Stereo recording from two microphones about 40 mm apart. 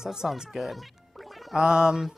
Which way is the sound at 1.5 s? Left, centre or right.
Centre.